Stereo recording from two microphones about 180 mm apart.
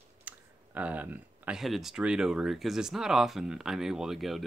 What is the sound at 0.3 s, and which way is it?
Clicking, 10° right (ahead or behind).